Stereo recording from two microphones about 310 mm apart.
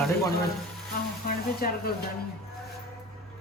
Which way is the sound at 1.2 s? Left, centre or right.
Left.